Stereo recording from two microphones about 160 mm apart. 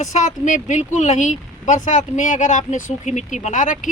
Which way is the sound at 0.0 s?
50° left (ahead or behind).